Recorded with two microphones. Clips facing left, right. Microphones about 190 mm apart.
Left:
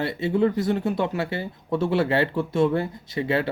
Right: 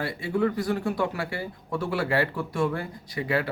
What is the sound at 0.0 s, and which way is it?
Speech, 25° left (ahead or behind).